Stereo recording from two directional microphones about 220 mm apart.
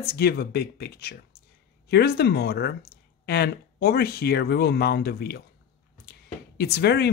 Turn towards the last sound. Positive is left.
turn(degrees=50)  # may be behind; listen again after turning